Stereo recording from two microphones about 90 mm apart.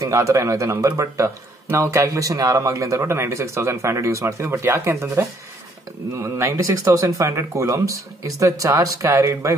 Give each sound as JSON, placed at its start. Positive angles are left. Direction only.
{"t": 0.0, "sound": "speech", "side_deg": -35}